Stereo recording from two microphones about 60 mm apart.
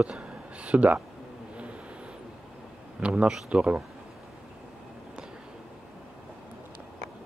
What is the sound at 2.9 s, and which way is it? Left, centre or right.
Speech, centre.